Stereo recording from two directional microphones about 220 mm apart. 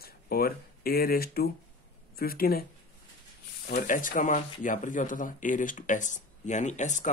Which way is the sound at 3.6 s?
40° left (ahead or behind).